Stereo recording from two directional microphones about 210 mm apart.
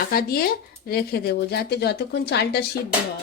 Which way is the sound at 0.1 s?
45° left (ahead or behind).